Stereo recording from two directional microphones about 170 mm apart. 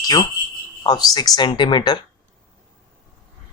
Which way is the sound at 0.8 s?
25° left (ahead or behind).